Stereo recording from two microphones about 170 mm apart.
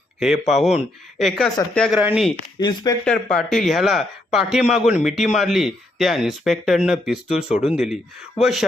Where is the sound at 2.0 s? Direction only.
5° right (ahead or behind).